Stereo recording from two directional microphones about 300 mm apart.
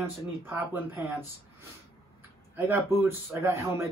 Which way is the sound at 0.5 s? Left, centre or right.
Centre.